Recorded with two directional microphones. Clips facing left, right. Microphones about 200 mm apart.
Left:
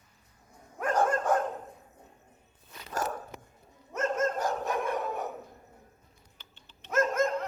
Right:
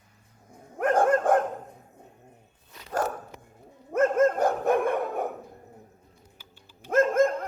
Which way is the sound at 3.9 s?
55° right (ahead or behind).